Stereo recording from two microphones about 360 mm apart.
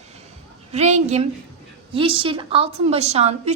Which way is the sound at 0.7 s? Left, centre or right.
Centre.